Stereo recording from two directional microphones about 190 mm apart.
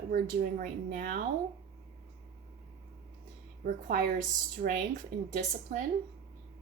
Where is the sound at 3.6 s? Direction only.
50° right (ahead or behind).